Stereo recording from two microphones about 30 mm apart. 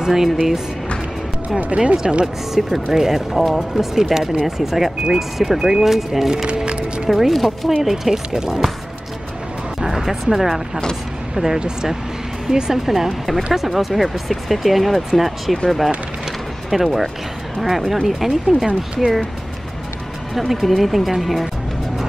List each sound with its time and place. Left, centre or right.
0.0 s speech: centre
2.0 s speech: right
2.5 s speech: centre
3.3 s speech: centre
3.9 s speech: centre
5.9 s speech: centre
6.3 s music: right
7.1 s speech: centre
9.8 s music: centre
10.3 s speech: centre
12.7 s speech: centre
16.7 s speech: centre
20.3 s speech: centre